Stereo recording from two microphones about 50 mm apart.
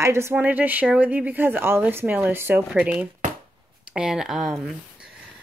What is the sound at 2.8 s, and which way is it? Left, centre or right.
Speech, right.